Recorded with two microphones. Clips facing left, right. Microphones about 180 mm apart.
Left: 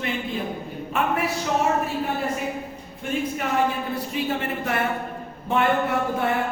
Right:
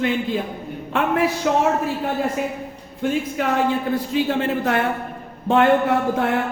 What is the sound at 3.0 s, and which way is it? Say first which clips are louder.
Speech: right 5 dB; 90° right.